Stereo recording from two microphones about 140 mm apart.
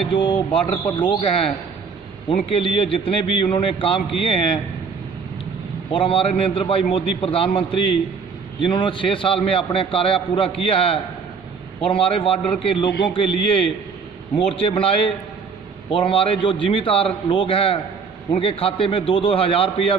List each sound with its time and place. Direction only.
0.1 s a man's voice: 40° left (ahead or behind)
2.2 s a man's voice: 40° left (ahead or behind)
5.9 s a man's voice: 40° left (ahead or behind)